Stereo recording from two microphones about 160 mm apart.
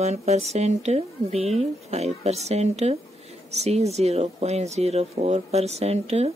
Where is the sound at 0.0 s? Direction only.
45° right (ahead or behind).